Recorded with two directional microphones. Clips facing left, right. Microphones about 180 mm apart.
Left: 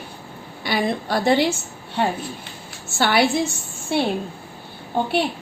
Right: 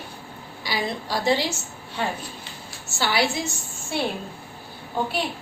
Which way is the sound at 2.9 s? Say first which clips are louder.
Left 5 dB; 60° left (ahead or behind).